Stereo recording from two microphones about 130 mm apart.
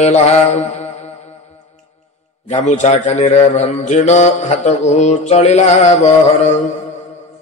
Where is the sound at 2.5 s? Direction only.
65° left (ahead or behind).